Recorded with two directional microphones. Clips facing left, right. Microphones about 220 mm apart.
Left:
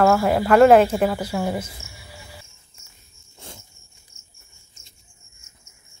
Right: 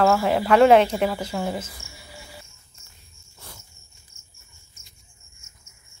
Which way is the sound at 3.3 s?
20° left (ahead or behind).